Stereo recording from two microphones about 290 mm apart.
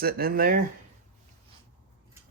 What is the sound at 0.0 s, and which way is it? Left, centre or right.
Speech, right.